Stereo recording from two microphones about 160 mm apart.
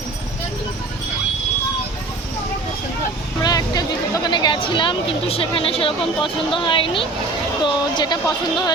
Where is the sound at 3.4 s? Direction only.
25° left (ahead or behind).